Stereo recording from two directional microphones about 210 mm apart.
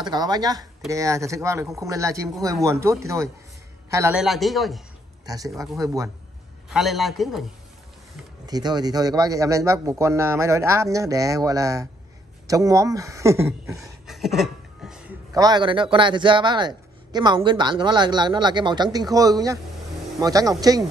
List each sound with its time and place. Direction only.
0.0 s speech: 20° right (ahead or behind)
4.2 s a man's voice: centre (ahead or behind)
5.2 s speech: 15° right (ahead or behind)
6.7 s a man's voice: centre (ahead or behind)
8.5 s speech: 20° right (ahead or behind)
13.7 s a sound: centre (ahead or behind)
15.3 s a man's voice: 20° right (ahead or behind)